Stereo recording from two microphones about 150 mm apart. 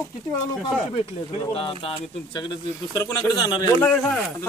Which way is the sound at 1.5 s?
40° left (ahead or behind).